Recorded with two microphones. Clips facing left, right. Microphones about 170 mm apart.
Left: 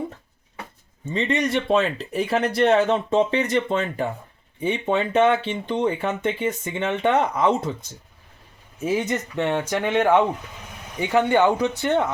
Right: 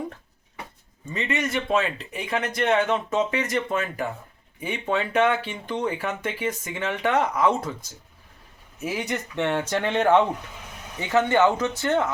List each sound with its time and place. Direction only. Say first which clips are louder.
1.0 s speech: left 5 dB; 30° left (ahead or behind)
8.8 s speech: left 5 dB; 25° left (ahead or behind)